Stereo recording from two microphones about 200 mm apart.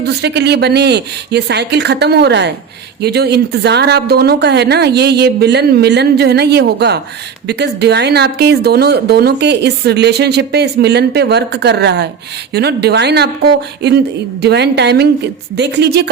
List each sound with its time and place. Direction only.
0.0 s speech: 55° right (ahead or behind)